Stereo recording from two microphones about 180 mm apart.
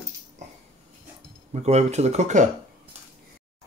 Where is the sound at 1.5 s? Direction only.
40° right (ahead or behind).